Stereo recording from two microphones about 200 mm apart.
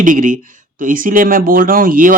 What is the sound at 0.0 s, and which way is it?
Speech, 40° right (ahead or behind).